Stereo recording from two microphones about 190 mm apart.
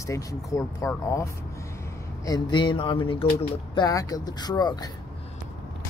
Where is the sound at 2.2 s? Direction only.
20° left (ahead or behind).